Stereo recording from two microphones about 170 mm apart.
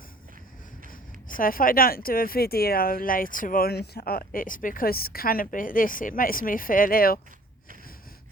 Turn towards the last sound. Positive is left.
turn(degrees=60)  # may be behind; listen again after turning